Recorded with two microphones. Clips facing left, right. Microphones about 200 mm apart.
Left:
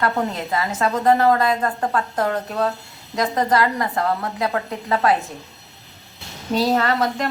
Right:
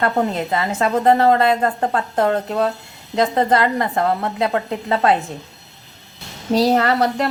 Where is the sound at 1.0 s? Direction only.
25° right (ahead or behind).